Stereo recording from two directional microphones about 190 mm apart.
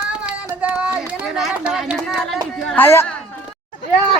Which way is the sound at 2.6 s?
10° left (ahead or behind).